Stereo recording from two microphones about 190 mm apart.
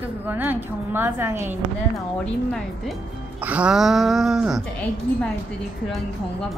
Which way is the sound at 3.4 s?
5° right (ahead or behind).